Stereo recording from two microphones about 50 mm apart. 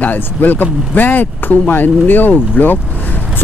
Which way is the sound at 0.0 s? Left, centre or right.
Left.